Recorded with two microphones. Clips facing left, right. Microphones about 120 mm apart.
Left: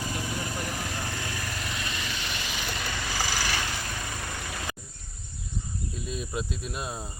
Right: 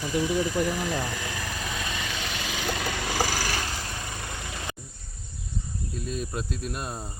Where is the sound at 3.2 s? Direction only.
45° right (ahead or behind).